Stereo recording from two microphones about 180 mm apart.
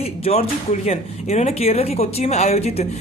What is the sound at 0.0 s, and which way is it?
Speech, 35° left (ahead or behind).